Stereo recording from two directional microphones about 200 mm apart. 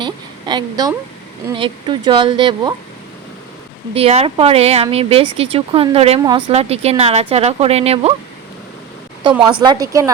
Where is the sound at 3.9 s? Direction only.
30° right (ahead or behind).